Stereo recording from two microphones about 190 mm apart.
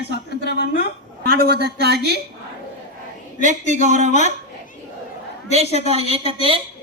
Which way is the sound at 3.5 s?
40° right (ahead or behind).